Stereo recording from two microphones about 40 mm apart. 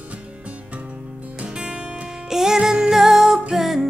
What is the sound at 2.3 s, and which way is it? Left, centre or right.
Music, centre.